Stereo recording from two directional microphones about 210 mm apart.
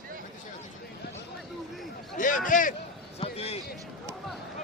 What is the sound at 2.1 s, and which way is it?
Speech, 40° left (ahead or behind).